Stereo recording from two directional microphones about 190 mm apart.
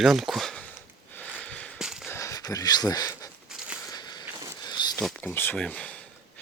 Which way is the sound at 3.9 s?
20° left (ahead or behind).